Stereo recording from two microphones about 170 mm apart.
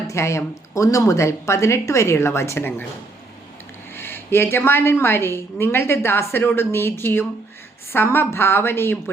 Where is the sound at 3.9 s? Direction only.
15° left (ahead or behind).